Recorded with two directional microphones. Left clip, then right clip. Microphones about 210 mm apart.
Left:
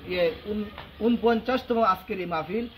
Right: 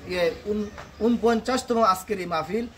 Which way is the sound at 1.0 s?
20° right (ahead or behind).